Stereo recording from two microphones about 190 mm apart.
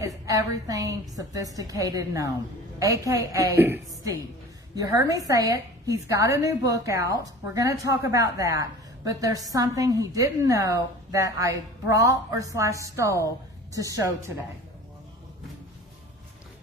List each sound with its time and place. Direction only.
0.0 s a woman's voice: 15° right (ahead or behind)
5.2 s a woman's voice: 15° right (ahead or behind)